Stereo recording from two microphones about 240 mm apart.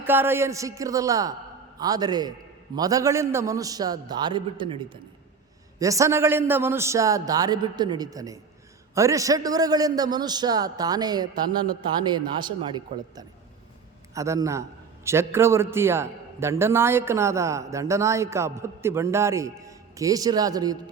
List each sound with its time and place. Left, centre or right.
0.0 s a man's voice: centre